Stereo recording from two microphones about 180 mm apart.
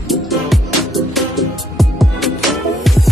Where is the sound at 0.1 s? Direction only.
Centre (ahead or behind).